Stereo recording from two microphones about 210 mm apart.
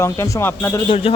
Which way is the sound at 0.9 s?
25° left (ahead or behind).